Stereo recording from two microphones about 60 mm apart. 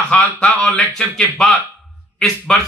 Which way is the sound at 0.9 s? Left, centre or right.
Centre.